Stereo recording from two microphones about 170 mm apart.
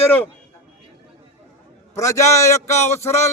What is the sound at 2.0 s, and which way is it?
Speech, 15° left (ahead or behind).